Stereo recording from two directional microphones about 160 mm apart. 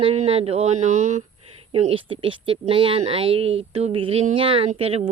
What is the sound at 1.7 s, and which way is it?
Speech, 35° right (ahead or behind).